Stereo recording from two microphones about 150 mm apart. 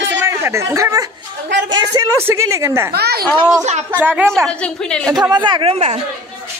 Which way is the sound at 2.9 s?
90° right.